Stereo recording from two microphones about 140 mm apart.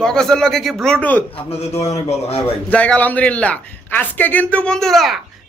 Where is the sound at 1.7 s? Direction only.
50° left (ahead or behind).